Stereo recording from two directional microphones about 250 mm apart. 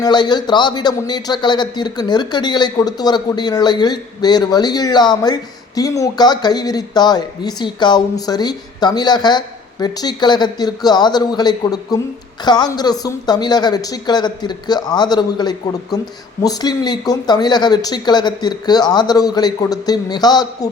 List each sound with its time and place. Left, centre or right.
0.0 s a man's voice: centre